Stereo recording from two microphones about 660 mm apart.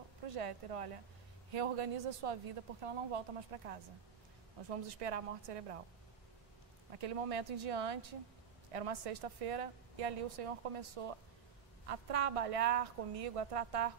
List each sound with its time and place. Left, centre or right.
0.3 s a woman's voice: right
7.0 s a woman's voice: right